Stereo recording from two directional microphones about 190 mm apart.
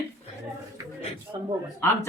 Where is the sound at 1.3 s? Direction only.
25° right (ahead or behind).